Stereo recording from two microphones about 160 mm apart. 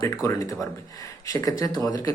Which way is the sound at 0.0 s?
20° left (ahead or behind).